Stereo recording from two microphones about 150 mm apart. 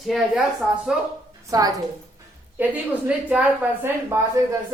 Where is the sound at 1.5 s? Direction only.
25° right (ahead or behind).